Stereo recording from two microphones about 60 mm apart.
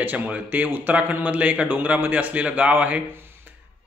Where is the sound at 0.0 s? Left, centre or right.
Right.